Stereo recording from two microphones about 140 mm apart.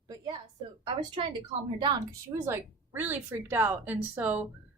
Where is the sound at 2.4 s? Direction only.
15° right (ahead or behind).